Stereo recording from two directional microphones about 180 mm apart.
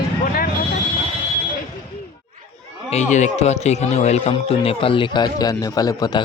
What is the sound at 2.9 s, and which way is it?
A man's voice, 40° left (ahead or behind).